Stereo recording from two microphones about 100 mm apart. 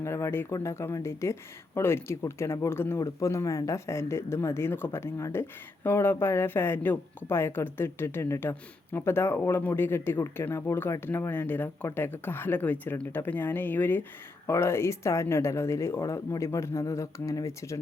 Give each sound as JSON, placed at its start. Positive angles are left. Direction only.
{"t": 0.0, "sound": "speech", "side_deg": 25}